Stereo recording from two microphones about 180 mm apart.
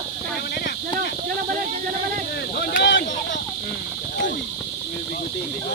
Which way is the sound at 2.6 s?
75° left (ahead or behind).